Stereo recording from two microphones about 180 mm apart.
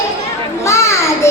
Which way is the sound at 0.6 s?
15° left (ahead or behind).